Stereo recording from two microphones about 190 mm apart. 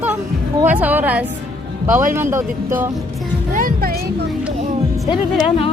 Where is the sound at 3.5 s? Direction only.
50° right (ahead or behind).